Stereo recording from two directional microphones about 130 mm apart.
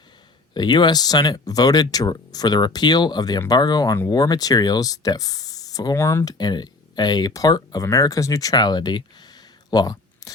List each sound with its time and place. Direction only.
0.5 s speech: 35° left (ahead or behind)